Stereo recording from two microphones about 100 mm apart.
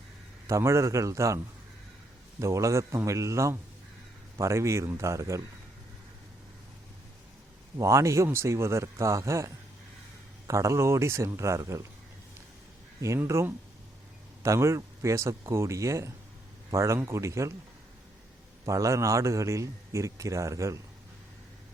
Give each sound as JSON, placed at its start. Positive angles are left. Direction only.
{"t": 0.4, "sound": "a man's voice", "side_deg": -30}
{"t": 2.4, "sound": "a man's voice", "side_deg": -30}
{"t": 7.8, "sound": "a man's voice", "side_deg": -30}
{"t": 13.1, "sound": "a man's voice", "side_deg": -25}
{"t": 18.6, "sound": "a man's voice", "side_deg": -30}